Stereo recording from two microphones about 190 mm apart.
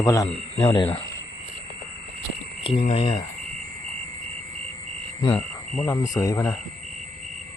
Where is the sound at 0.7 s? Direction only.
30° left (ahead or behind).